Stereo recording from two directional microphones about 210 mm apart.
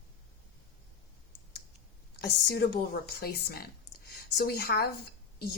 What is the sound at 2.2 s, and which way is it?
A woman's voice, 50° left (ahead or behind).